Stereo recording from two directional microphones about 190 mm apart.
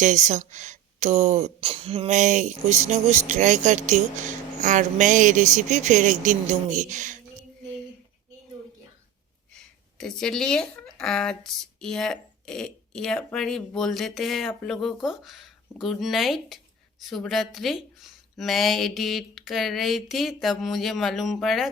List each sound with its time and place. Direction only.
0.0 s speech: 40° right (ahead or behind)
9.5 s speech: 5° left (ahead or behind)